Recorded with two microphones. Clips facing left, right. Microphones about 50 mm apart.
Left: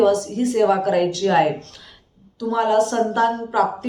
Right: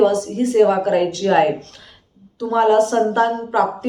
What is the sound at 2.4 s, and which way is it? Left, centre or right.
Speech, right.